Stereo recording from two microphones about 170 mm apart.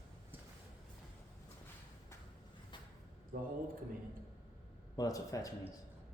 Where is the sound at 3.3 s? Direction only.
55° right (ahead or behind).